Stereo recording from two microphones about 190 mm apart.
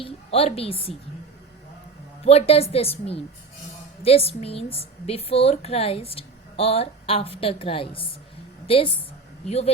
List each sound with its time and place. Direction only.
0.0 s a woman's voice: 30° left (ahead or behind)
2.2 s a woman's voice: 30° left (ahead or behind)